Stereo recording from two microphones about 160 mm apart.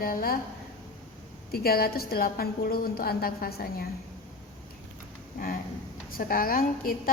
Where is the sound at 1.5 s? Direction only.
75° left (ahead or behind).